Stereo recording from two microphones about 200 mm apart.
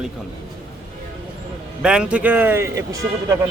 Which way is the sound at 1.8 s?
5° right (ahead or behind).